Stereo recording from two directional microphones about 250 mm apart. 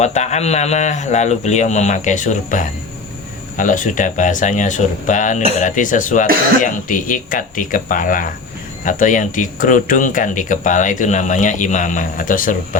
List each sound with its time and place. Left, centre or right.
0.0 s speech: left